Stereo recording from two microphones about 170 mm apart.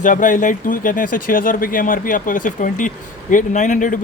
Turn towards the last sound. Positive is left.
turn(degrees=50)  # may be behind; listen again after turning